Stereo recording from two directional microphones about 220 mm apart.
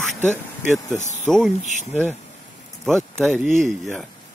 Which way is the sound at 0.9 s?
35° left (ahead or behind).